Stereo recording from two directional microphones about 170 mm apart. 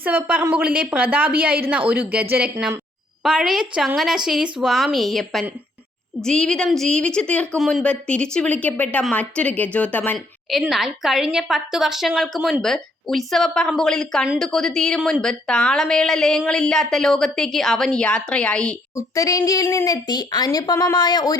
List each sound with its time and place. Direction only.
0.0 s a woman's voice: 10° right (ahead or behind); by 10.2 s 10° left (ahead or behind)
10.5 s a woman's voice: centre (ahead or behind)
18.9 s speech: 20° left (ahead or behind)